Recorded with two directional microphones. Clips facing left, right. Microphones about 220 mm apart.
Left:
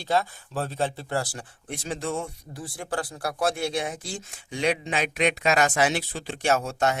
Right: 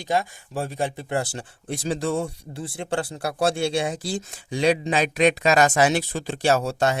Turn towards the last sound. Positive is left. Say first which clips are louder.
# right 3 dB
turn(degrees=-35)  # may be behind; listen again after turning